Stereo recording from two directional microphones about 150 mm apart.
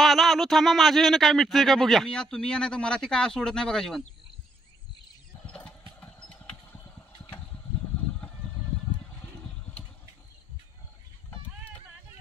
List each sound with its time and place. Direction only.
0.0 s speech: centre (ahead or behind)
5.5 s engine: 5° left (ahead or behind)